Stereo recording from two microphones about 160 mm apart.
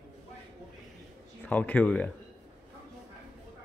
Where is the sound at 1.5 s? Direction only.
10° left (ahead or behind).